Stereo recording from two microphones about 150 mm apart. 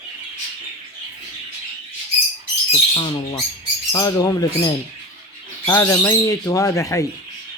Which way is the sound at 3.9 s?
25° left (ahead or behind).